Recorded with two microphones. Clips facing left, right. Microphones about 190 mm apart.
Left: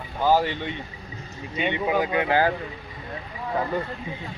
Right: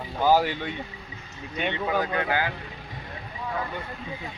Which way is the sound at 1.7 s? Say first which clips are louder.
Left 4 dB; 15° left (ahead or behind).